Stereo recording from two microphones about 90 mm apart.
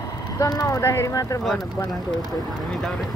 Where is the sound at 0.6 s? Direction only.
30° left (ahead or behind).